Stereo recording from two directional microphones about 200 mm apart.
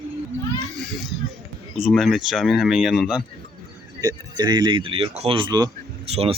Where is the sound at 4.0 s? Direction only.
20° right (ahead or behind).